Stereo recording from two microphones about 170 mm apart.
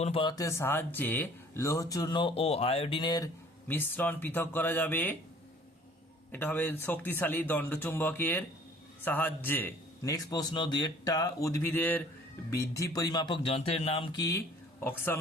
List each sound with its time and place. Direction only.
0.0 s speech: 30° left (ahead or behind)
3.7 s a man's voice: 10° left (ahead or behind)
6.3 s a man's voice: 10° left (ahead or behind)